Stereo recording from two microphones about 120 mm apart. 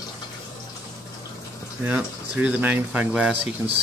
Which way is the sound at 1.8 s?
10° right (ahead or behind).